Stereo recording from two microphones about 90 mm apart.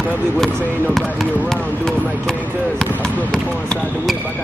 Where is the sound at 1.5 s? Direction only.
5° left (ahead or behind).